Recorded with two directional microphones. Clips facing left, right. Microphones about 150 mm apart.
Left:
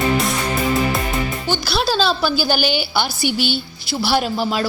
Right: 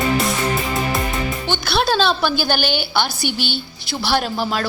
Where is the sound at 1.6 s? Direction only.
Centre (ahead or behind).